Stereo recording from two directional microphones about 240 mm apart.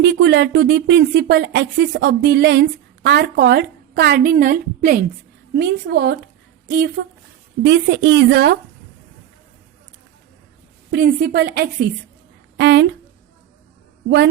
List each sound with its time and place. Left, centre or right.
0.0 s speech: right
10.9 s a woman's voice: right